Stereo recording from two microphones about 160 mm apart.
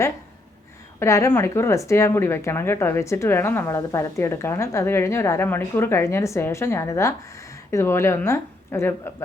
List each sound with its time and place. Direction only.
0.9 s speech: 20° left (ahead or behind)